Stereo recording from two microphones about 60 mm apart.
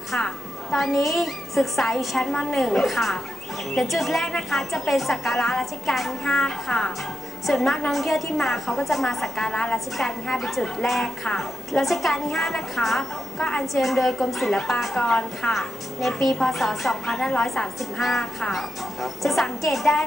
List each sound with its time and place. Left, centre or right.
0.7 s a woman's voice: centre
9.5 s a woman's voice: centre
9.9 s a woman's voice: centre
15.5 s a woman's voice: centre